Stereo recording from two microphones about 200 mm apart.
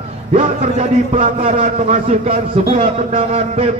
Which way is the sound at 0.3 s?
35° right (ahead or behind).